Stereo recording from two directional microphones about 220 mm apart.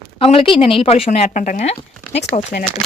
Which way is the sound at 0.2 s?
25° left (ahead or behind).